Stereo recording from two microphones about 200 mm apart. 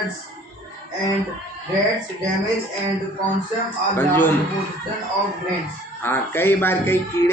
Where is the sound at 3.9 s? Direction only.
10° left (ahead or behind).